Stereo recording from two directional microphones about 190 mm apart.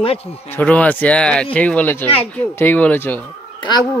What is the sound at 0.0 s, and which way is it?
Speech, 30° left (ahead or behind).